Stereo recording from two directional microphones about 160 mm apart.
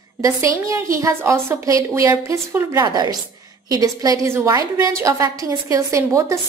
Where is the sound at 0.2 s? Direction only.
20° right (ahead or behind).